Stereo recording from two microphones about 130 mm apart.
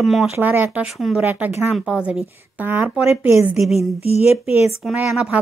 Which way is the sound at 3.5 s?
Centre (ahead or behind).